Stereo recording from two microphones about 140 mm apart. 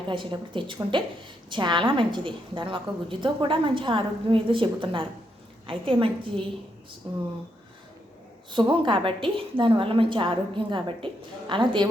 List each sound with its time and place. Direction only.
0.1 s a woman's voice: 35° right (ahead or behind)
8.4 s a woman's voice: 35° right (ahead or behind)